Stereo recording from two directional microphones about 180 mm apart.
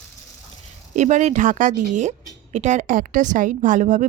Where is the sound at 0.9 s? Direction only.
40° right (ahead or behind).